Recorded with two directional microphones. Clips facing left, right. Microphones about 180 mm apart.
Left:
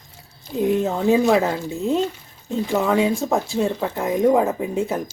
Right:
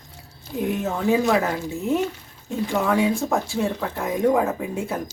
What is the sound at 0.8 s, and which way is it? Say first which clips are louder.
Speech: left 1 dB; 20° left (ahead or behind).